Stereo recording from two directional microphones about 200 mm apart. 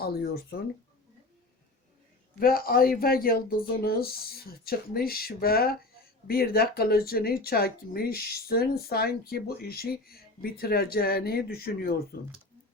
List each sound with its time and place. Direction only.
0.0 s speech: 50° left (ahead or behind)
2.4 s speech: 45° left (ahead or behind)